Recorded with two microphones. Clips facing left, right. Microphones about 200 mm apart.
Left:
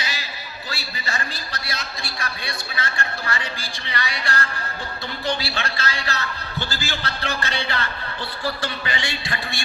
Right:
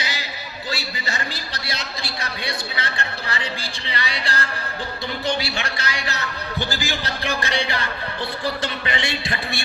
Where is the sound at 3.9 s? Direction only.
25° right (ahead or behind).